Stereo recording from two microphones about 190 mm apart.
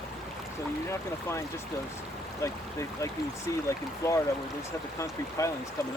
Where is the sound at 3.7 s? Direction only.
15° left (ahead or behind).